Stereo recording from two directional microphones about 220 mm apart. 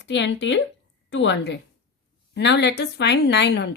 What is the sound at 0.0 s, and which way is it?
Speech, 55° left (ahead or behind).